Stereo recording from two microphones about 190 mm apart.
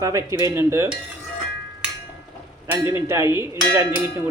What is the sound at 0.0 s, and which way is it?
Cowbell, 15° right (ahead or behind).